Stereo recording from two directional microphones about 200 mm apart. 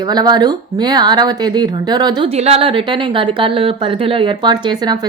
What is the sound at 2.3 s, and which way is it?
Speech, 30° right (ahead or behind).